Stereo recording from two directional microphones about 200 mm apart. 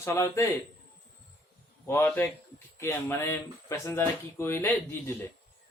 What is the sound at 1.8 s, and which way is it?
Speech, 10° left (ahead or behind).